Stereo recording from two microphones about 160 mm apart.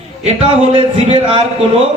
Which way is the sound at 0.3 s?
35° right (ahead or behind).